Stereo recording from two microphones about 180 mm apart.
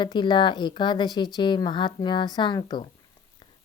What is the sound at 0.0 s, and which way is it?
Speech, 25° left (ahead or behind).